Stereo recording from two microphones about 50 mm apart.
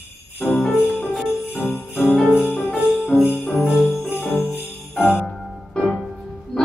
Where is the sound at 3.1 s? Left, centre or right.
Centre.